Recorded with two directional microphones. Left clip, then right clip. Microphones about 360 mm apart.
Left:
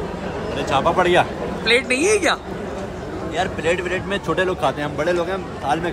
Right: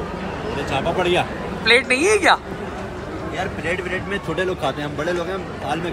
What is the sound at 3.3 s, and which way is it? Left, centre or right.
Speech, left.